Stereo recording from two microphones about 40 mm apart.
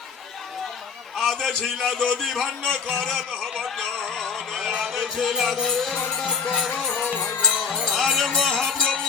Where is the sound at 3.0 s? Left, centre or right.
Centre.